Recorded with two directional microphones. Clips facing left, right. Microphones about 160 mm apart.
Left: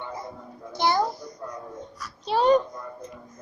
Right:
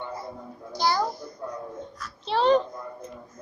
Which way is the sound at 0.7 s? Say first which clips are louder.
Left 2 dB; 20° left (ahead or behind).